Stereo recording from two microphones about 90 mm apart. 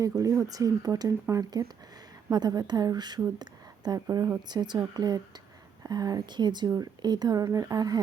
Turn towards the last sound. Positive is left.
turn(degrees=-45)  # may be behind; listen again after turning